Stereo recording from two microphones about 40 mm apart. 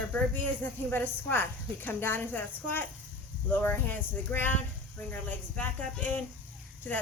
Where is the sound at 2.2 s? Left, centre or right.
Left.